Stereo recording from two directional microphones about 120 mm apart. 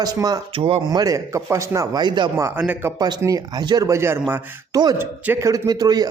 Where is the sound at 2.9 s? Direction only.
35° right (ahead or behind).